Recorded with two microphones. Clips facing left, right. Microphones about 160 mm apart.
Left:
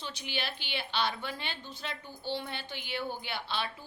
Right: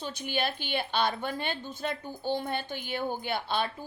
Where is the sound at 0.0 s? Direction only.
50° right (ahead or behind).